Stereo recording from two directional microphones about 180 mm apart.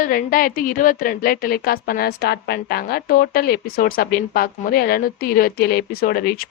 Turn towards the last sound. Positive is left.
turn(degrees=55)  # may be behind; listen again after turning